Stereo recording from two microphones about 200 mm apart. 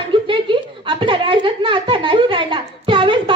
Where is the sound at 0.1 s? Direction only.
25° right (ahead or behind).